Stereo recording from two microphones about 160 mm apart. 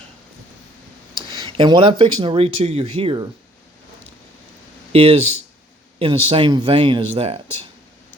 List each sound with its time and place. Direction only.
1.1 s speech: 25° right (ahead or behind)
4.9 s speech: 40° right (ahead or behind)